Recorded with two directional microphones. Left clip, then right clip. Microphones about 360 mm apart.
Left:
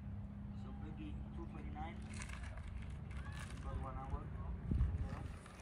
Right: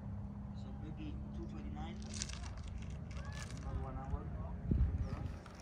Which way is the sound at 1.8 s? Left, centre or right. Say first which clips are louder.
Right 3 dB; centre.